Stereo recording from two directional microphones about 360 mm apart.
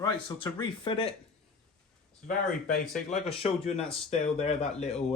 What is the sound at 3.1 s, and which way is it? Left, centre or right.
Speech, centre.